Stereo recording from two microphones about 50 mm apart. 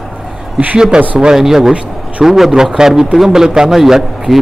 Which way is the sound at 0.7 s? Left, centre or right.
Centre.